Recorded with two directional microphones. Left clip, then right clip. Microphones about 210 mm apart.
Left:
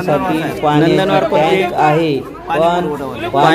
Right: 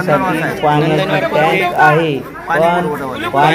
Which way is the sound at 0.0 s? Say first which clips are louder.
Right 1 dB; 15° left (ahead or behind).